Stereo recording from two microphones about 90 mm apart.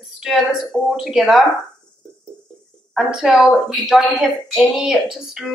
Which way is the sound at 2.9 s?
5° right (ahead or behind).